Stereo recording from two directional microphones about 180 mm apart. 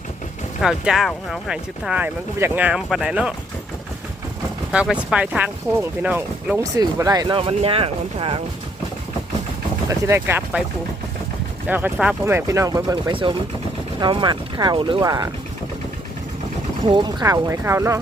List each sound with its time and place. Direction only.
0.6 s speech: centre (ahead or behind)
4.7 s speech: 5° right (ahead or behind)
6.6 s speech: 20° right (ahead or behind)
9.9 s speech: 15° right (ahead or behind)
11.7 s speech: 5° right (ahead or behind)
16.9 s speech: 25° right (ahead or behind)